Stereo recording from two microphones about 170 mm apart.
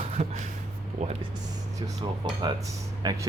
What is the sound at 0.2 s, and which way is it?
Speech, 40° right (ahead or behind).